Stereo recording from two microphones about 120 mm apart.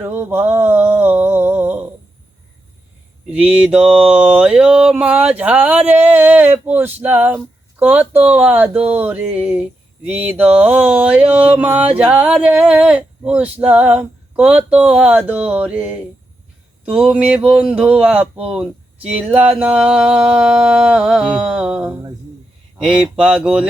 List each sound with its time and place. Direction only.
0.0 s a sound: 20° right (ahead or behind)
3.2 s mantra: 10° right (ahead or behind)
17.1 s mantra: 10° right (ahead or behind)